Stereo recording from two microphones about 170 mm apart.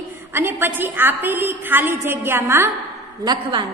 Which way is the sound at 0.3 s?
15° right (ahead or behind).